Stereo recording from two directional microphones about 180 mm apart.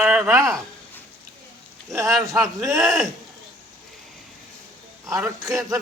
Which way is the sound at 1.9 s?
15° right (ahead or behind).